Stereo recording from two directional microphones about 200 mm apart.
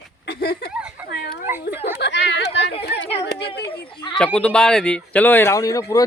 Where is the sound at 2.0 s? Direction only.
60° left (ahead or behind).